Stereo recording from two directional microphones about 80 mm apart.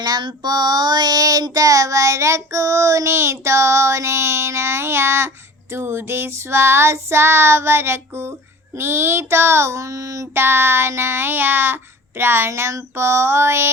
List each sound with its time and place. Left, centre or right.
0.0 s child singing: right
10.4 s child singing: right